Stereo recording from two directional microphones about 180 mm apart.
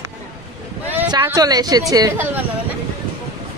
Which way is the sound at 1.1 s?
20° right (ahead or behind).